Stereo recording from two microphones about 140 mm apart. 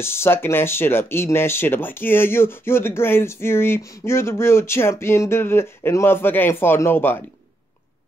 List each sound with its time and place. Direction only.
0.0 s speech: 15° left (ahead or behind)